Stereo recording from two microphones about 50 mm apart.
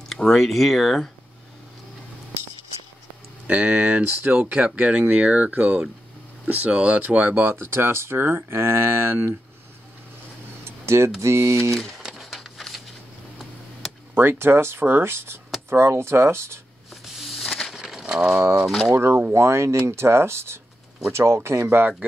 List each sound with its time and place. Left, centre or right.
0.1 s speech: centre
3.4 s speech: right
7.3 s speech: right
10.6 s a sound: right
11.1 s speech: right
12.0 s a sound: centre
14.1 s speech: right
16.9 s shuffling cards: centre
17.5 s crushing: centre
17.7 s crushing: centre
18.9 s speech: right
19.3 s speech: right
21.6 s speech: right